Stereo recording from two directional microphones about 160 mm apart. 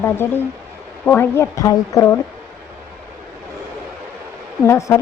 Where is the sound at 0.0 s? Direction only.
15° left (ahead or behind).